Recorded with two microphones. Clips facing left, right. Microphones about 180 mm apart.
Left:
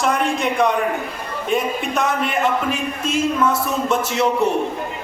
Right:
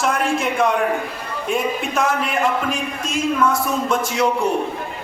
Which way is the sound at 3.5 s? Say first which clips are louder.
Even; 25° left (ahead or behind).